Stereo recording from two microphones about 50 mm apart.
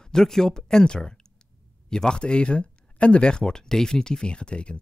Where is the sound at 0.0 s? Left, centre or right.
Centre.